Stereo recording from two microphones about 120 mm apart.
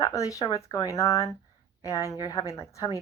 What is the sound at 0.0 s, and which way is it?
Speech, 30° left (ahead or behind).